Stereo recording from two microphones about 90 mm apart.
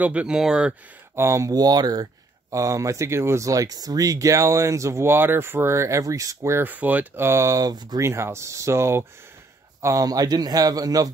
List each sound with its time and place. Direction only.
0.0 s speech: 15° right (ahead or behind)
1.1 s a man's voice: 35° right (ahead or behind)
2.5 s speech: 35° right (ahead or behind); by 7.2 s 20° right (ahead or behind)
7.2 s a man's voice: 35° right (ahead or behind); by 8.0 s 50° right (ahead or behind)
8.0 s a man's voice: 30° right (ahead or behind)